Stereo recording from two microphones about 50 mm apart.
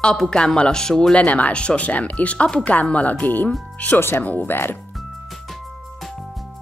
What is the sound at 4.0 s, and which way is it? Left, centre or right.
Speech, left.